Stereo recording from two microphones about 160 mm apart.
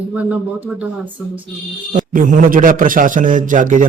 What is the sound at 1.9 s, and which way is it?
A man's voice, 55° right (ahead or behind).